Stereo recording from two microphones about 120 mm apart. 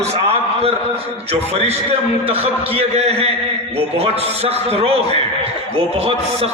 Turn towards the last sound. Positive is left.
turn(degrees=-55)  # may be behind; listen again after turning